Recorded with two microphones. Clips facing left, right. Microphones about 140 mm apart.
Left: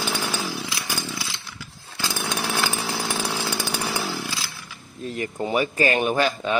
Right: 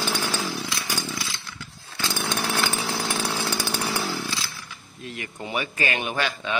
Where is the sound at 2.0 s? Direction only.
10° left (ahead or behind).